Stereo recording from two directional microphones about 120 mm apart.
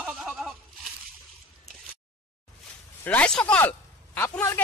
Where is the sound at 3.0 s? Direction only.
10° left (ahead or behind).